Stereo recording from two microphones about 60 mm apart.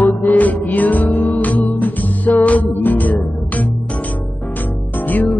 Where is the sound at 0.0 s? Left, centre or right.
Left.